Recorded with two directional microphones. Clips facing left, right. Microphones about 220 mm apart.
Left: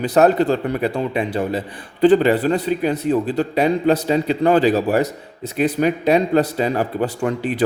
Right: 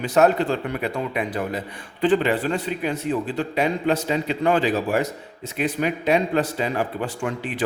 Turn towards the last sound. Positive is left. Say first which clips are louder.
# left 6 dB
turn(degrees=40)  # may be behind; listen again after turning